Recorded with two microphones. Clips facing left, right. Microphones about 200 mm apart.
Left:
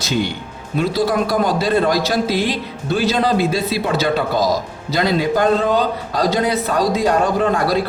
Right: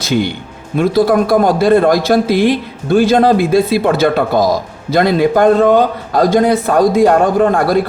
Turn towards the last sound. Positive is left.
turn(degrees=-50)  # may be behind; listen again after turning